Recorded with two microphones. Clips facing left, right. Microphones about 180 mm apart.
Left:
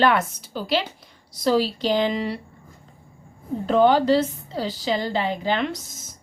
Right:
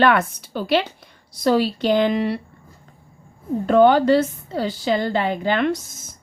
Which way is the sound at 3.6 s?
55° right (ahead or behind).